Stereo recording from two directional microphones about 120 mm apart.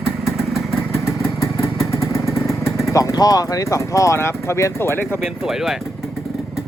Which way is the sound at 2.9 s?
30° left (ahead or behind).